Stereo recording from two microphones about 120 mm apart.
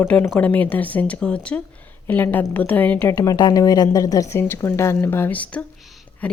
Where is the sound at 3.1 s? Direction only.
30° left (ahead or behind); by 5.7 s 10° left (ahead or behind).